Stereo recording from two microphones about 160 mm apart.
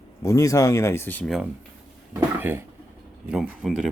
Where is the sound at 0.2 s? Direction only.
20° left (ahead or behind).